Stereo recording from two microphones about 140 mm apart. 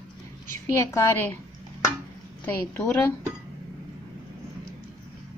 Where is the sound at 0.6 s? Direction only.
20° left (ahead or behind).